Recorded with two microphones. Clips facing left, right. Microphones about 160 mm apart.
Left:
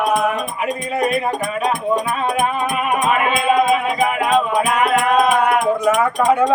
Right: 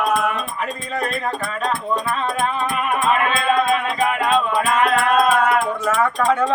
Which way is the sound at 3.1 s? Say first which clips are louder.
Left 1 dB; 10° left (ahead or behind).